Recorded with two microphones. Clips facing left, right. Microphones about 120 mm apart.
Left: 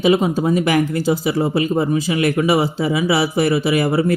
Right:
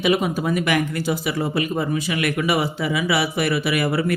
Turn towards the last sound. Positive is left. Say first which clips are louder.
# left 5 dB
turn(degrees=25)  # may be behind; listen again after turning